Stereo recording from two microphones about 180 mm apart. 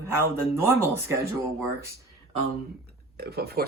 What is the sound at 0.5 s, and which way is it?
Speech, 15° right (ahead or behind).